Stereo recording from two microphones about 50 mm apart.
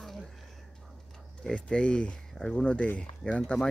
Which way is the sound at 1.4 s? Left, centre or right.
Centre.